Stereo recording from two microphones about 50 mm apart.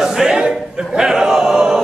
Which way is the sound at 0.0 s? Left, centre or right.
Centre.